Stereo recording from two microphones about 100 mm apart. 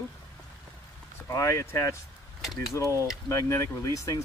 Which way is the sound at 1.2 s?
35° left (ahead or behind).